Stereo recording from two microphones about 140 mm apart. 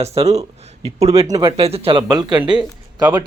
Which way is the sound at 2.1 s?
30° right (ahead or behind).